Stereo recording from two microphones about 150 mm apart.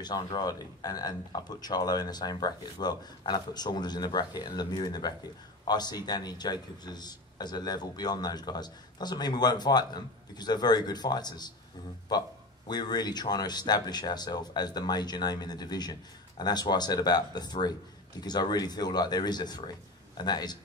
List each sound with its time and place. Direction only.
0.0 s speech: 30° left (ahead or behind)